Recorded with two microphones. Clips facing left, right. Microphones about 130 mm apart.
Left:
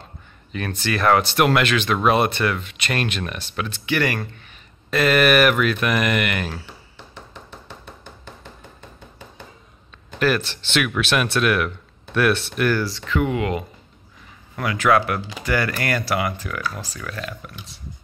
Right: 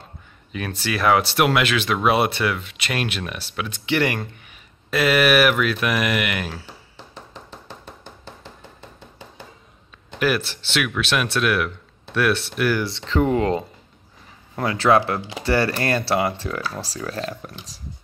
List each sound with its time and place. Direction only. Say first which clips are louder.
0.5 s speech: left 1 dB; 5° right (ahead or behind)
3.8 s speech: right 1 dB; 25° right (ahead or behind); by 6.6 s 5° right (ahead or behind)
7.2 s a sound: even; 35° right (ahead or behind)
10.1 s speech: left 1 dB; 10° right (ahead or behind)
12.7 s speech: right 1 dB; 25° right (ahead or behind)